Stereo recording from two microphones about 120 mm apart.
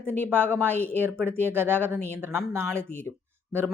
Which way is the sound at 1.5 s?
15° right (ahead or behind).